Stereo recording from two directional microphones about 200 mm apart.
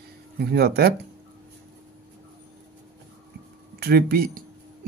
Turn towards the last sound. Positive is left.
turn(degrees=-50)  # may be behind; listen again after turning